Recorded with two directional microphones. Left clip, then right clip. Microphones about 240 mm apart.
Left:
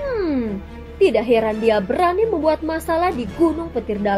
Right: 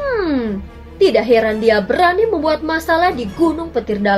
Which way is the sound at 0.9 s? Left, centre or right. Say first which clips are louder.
Right 4 dB; left.